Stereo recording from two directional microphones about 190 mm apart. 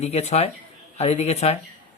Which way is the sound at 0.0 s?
35° left (ahead or behind).